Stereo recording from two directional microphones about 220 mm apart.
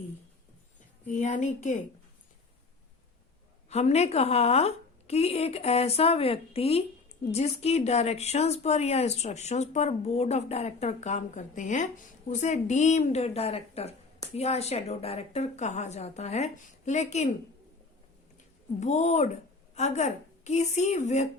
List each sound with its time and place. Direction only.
1.0 s a woman's voice: 35° left (ahead or behind)
3.7 s a woman's voice: 30° left (ahead or behind)
18.8 s a woman's voice: 30° left (ahead or behind)